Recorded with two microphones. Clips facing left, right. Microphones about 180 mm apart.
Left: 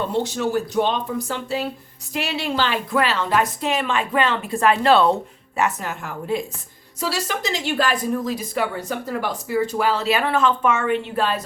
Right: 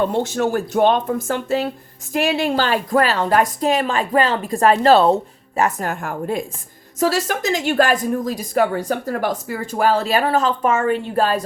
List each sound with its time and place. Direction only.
0.0 s a woman's voice: 50° right (ahead or behind)